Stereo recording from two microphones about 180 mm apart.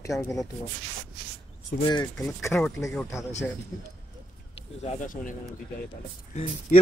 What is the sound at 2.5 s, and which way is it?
Speech, centre (ahead or behind).